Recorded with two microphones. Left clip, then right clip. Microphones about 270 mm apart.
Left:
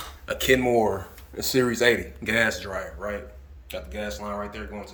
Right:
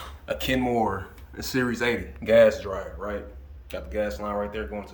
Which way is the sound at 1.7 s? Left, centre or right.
Centre.